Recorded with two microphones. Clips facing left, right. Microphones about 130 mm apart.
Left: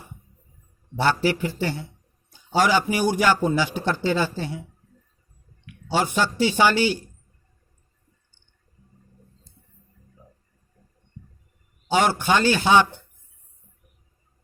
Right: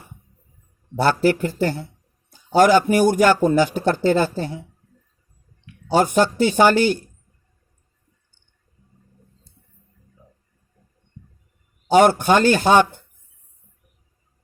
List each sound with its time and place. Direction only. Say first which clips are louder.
0.9 s a man's voice: right 4 dB; 45° right (ahead or behind)
6.1 s a man's voice: right 2 dB; 45° right (ahead or behind)
11.9 s a man's voice: right 6 dB; 50° right (ahead or behind)